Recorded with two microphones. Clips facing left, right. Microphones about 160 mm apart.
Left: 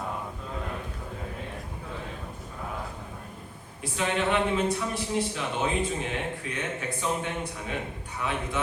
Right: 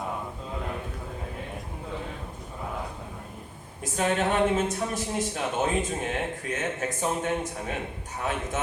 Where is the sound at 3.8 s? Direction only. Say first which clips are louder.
Right 2 dB; 45° right (ahead or behind).